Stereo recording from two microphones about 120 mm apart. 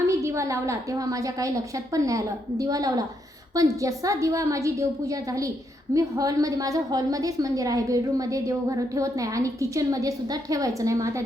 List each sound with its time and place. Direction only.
0.1 s a woman's voice: 25° right (ahead or behind)